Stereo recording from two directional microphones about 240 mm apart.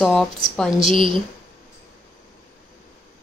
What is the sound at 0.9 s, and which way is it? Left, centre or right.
Speech, right.